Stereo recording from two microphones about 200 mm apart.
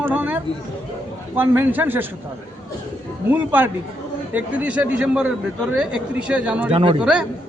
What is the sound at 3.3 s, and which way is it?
A man's voice, 10° right (ahead or behind).